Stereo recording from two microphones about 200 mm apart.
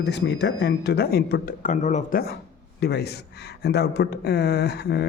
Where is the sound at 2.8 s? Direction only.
55° left (ahead or behind).